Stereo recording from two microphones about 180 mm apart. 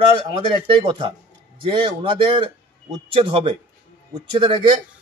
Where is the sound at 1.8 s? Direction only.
30° right (ahead or behind).